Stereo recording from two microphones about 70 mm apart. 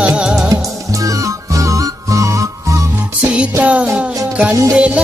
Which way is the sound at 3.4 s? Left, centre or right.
Centre.